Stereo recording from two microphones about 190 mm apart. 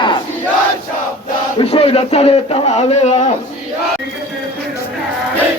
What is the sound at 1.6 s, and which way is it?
Speech, 30° left (ahead or behind).